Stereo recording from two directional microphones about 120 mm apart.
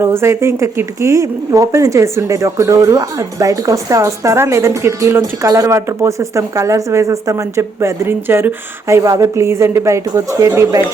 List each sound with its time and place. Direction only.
0.0 s speech: 20° right (ahead or behind)